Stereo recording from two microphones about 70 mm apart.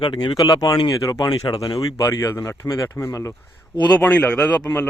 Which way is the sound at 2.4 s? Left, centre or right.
Left.